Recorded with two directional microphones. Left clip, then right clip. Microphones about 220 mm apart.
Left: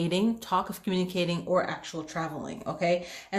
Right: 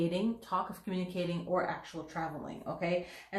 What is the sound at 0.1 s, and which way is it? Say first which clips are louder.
Speech: left 7 dB; 50° left (ahead or behind).